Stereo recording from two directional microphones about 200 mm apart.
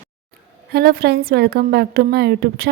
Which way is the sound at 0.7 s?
50° right (ahead or behind).